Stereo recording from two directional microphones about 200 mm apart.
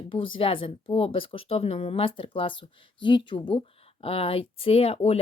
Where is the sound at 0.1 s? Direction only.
25° left (ahead or behind).